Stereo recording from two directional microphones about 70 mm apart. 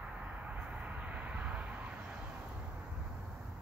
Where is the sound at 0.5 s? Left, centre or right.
Centre.